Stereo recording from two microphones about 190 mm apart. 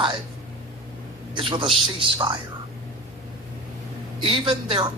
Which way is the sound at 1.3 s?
25° right (ahead or behind).